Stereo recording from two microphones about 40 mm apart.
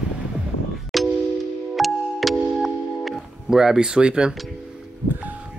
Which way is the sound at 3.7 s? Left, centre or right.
Right.